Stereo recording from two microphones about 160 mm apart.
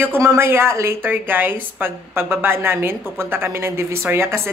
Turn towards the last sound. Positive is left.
turn(degrees=-15)  # may be behind; listen again after turning